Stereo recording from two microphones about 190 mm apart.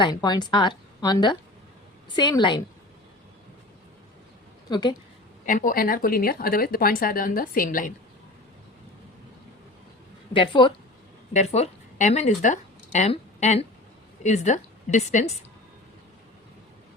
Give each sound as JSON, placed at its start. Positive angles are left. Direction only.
{"t": 0.0, "sound": "a woman's voice", "side_deg": 20}
{"t": 4.7, "sound": "a woman's voice", "side_deg": 25}
{"t": 5.5, "sound": "speech", "side_deg": 45}
{"t": 10.3, "sound": "a woman's voice", "side_deg": 25}
{"t": 11.3, "sound": "a woman's voice", "side_deg": 35}